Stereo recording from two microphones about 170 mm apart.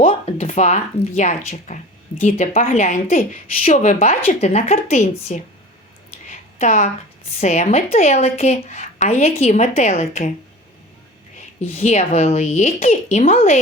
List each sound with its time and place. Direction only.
0.0 s a woman's voice: 35° left (ahead or behind)
6.2 s a sound: 45° left (ahead or behind)
7.3 s a woman's voice: 45° left (ahead or behind)
11.7 s a woman's voice: 40° left (ahead or behind)